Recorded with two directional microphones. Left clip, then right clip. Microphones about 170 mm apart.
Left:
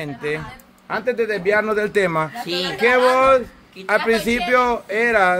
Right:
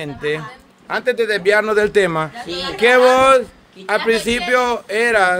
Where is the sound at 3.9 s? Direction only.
15° right (ahead or behind).